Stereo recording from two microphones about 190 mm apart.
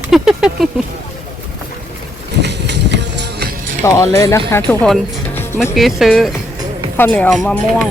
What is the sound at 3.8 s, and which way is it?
Speech, 15° left (ahead or behind).